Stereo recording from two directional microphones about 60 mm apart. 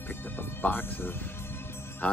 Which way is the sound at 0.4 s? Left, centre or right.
Left.